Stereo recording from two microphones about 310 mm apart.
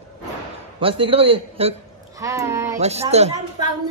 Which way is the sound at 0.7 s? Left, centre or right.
Centre.